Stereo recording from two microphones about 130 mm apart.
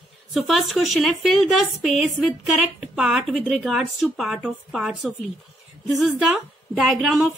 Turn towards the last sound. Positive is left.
turn(degrees=0)  # may be behind; listen again after turning